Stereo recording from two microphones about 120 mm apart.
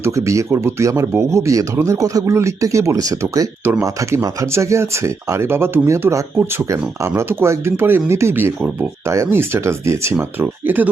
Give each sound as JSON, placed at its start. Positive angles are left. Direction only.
{"t": 0.0, "sound": "speech", "side_deg": -25}
{"t": 3.6, "sound": "speech", "side_deg": -20}